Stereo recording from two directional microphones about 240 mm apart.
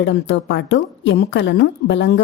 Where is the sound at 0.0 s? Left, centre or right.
Left.